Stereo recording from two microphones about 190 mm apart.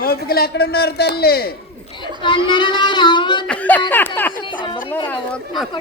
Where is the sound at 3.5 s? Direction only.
10° left (ahead or behind).